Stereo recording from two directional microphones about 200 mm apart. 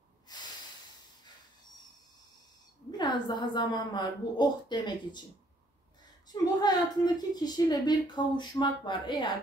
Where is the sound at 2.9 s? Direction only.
20° left (ahead or behind).